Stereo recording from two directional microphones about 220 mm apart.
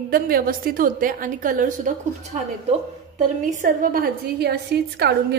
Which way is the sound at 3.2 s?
35° right (ahead or behind).